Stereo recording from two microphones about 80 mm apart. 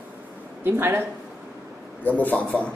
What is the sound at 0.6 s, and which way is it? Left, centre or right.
Speech, right.